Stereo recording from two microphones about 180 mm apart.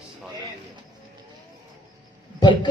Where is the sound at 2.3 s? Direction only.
25° left (ahead or behind).